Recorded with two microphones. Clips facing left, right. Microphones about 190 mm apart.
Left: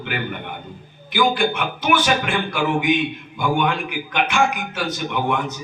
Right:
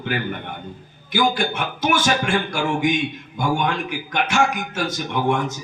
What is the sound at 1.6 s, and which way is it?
A man's voice, 45° right (ahead or behind).